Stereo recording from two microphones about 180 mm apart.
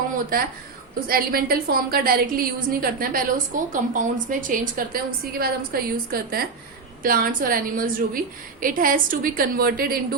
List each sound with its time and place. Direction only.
1.0 s a woman's voice: 55° right (ahead or behind)